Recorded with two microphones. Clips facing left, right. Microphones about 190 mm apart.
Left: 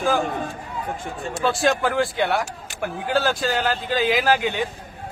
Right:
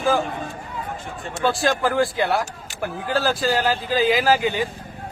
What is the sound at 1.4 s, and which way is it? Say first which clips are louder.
Speech: even; centre (ahead or behind).